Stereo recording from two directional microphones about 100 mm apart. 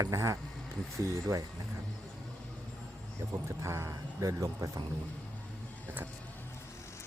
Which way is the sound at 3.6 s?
25° right (ahead or behind).